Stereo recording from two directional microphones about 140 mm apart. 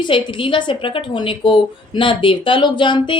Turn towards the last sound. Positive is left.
turn(degrees=35)  # may be behind; listen again after turning